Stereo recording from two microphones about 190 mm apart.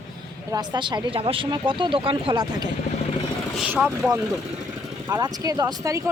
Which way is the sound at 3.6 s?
10° right (ahead or behind).